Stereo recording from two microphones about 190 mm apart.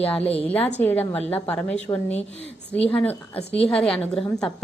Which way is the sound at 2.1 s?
35° left (ahead or behind).